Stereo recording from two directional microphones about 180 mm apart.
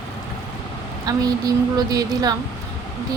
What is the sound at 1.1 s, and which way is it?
Speech, 20° right (ahead or behind).